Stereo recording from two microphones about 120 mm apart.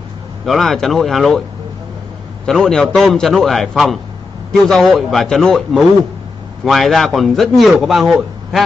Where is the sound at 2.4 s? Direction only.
5° left (ahead or behind).